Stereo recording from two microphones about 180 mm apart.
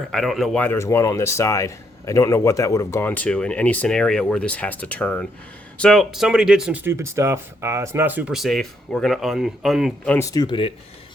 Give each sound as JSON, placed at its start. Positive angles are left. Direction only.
{"t": 0.1, "sound": "speech", "side_deg": 0}
{"t": 10.1, "sound": "speech", "side_deg": 15}